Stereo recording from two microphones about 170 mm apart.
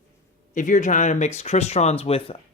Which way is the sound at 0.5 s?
50° left (ahead or behind).